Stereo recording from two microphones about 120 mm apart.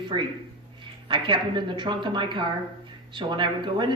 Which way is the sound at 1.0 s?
45° right (ahead or behind).